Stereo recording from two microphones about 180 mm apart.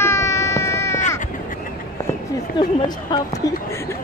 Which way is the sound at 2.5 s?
25° left (ahead or behind).